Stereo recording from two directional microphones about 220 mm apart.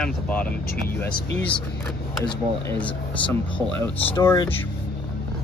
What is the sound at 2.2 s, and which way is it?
Speech, 10° left (ahead or behind).